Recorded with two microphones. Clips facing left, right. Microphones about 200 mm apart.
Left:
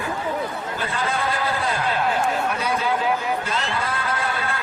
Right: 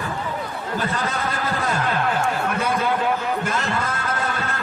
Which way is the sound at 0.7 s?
40° right (ahead or behind).